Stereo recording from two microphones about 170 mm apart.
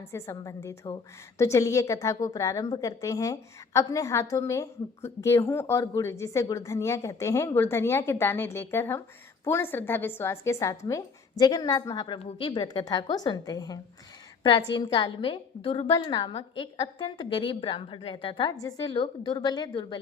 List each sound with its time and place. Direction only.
0.1 s a woman's voice: 15° left (ahead or behind)